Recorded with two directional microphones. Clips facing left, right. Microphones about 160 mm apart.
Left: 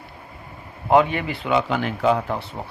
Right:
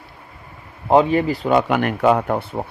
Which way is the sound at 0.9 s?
35° right (ahead or behind).